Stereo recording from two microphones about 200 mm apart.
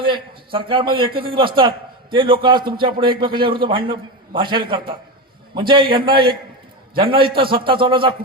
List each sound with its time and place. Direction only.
0.0 s a man's voice: 25° right (ahead or behind)